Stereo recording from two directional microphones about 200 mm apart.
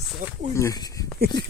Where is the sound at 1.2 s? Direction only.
50° right (ahead or behind).